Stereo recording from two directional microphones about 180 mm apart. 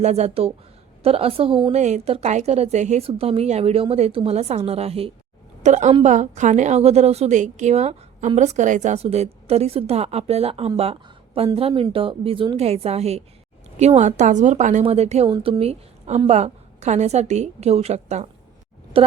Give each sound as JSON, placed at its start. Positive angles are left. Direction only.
{"t": 0.0, "sound": "a woman's voice", "side_deg": -35}